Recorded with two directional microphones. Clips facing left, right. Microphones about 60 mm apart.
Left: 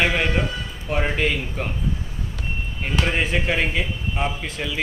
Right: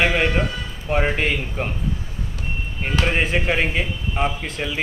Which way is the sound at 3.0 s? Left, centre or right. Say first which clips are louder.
Right 2 dB; centre.